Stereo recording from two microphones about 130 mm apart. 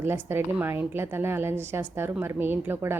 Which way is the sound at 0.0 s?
20° right (ahead or behind).